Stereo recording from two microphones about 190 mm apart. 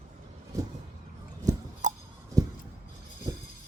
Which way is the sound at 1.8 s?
40° right (ahead or behind).